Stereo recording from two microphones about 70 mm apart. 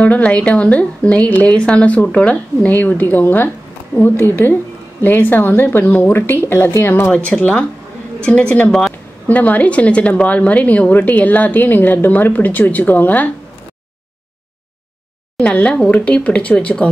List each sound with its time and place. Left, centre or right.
0.0 s a woman's voice: centre
7.3 s a woman's voice: centre
15.4 s speech: centre